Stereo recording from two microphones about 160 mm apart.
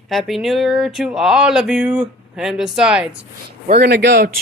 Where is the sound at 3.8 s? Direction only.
85° right.